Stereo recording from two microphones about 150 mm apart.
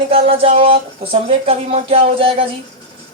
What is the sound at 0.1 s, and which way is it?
Speech, 40° right (ahead or behind).